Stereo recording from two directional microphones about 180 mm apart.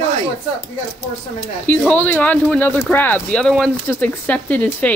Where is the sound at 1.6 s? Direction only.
5° left (ahead or behind).